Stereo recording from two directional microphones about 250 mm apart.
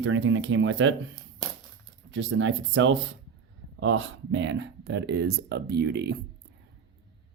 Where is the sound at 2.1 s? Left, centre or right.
Right.